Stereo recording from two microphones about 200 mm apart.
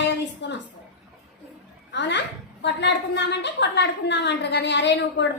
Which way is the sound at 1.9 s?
60° left (ahead or behind).